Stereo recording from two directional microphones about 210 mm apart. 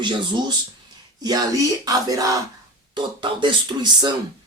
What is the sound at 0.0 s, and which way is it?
Speech, 20° right (ahead or behind).